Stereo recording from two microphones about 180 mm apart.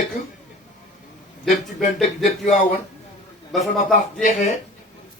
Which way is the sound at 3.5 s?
Centre (ahead or behind).